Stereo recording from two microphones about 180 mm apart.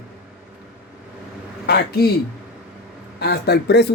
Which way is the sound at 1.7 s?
65° left (ahead or behind).